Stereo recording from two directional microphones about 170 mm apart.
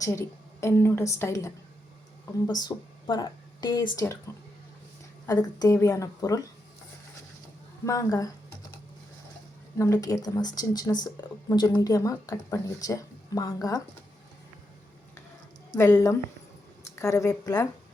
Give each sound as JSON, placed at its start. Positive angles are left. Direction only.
{"t": 0.0, "sound": "a woman's voice", "side_deg": 15}
{"t": 5.2, "sound": "speech", "side_deg": 20}
{"t": 7.9, "sound": "speech", "side_deg": 20}
{"t": 9.7, "sound": "speech", "side_deg": 20}
{"t": 15.7, "sound": "a woman's voice", "side_deg": 20}